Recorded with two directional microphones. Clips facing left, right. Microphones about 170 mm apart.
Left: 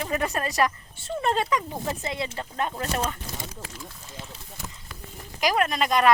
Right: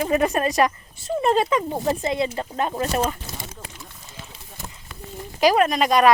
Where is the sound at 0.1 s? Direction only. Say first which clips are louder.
Right 7 dB; 20° right (ahead or behind).